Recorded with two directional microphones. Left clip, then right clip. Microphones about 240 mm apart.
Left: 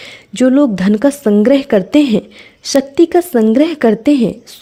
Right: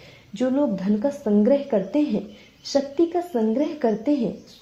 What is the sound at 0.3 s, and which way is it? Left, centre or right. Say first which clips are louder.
A woman's voice: left 11 dB; left.